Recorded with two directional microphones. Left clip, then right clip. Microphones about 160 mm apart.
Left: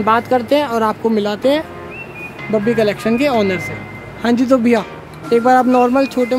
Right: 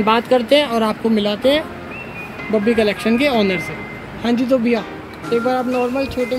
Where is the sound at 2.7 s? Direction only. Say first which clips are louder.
Left 1 dB; 10° left (ahead or behind).